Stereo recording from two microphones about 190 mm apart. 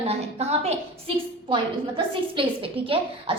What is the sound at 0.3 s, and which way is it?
A woman's voice, 35° right (ahead or behind).